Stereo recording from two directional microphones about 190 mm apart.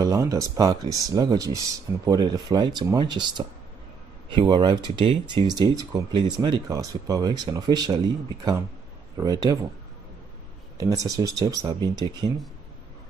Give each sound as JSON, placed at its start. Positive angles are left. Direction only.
{"t": 0.0, "sound": "speech", "side_deg": -20}
{"t": 9.1, "sound": "speech", "side_deg": -20}
{"t": 10.8, "sound": "speech", "side_deg": -20}